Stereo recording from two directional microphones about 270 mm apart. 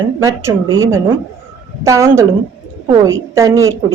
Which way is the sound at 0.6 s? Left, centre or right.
Right.